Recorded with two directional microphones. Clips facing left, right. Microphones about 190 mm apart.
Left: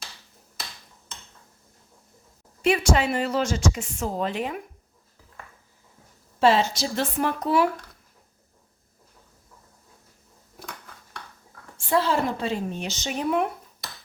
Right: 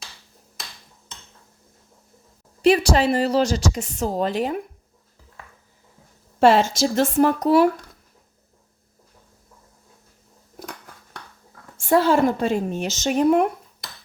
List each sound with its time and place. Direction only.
2.6 s speech: 35° right (ahead or behind)
6.4 s speech: 50° right (ahead or behind)
11.8 s speech: 50° right (ahead or behind)